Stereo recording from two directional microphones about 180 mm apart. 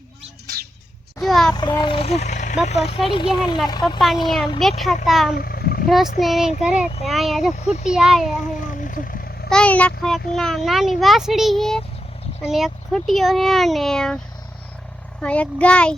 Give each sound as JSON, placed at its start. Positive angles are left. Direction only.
{"t": 1.2, "sound": "a sound", "side_deg": 0}
{"t": 1.5, "sound": "speech", "side_deg": 25}
{"t": 3.9, "sound": "a child's voice", "side_deg": 0}
{"t": 5.3, "sound": "a sound", "side_deg": 55}
{"t": 5.9, "sound": "a child's voice", "side_deg": 0}
{"t": 7.5, "sound": "speech", "side_deg": 40}
{"t": 7.9, "sound": "a child's voice", "side_deg": 0}
{"t": 8.6, "sound": "vehicle", "side_deg": 45}
{"t": 9.5, "sound": "a child's voice", "side_deg": 5}
{"t": 15.2, "sound": "a child's voice", "side_deg": 5}